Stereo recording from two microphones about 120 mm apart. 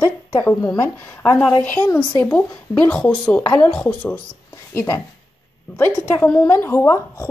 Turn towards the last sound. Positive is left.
turn(degrees=25)  # may be behind; listen again after turning